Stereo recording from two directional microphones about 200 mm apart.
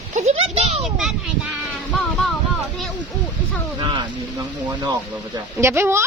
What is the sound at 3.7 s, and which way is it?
Speech, 20° right (ahead or behind).